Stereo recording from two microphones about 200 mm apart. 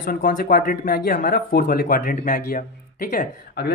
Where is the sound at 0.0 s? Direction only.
45° left (ahead or behind).